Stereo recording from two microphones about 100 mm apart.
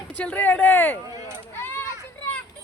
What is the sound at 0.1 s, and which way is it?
Speech, 15° left (ahead or behind).